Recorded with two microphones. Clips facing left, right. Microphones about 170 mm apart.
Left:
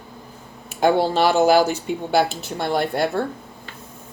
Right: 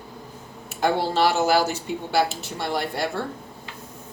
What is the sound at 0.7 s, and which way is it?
Speech, 55° left (ahead or behind).